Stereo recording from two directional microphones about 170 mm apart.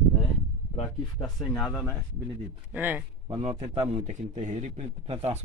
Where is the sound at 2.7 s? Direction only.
10° right (ahead or behind).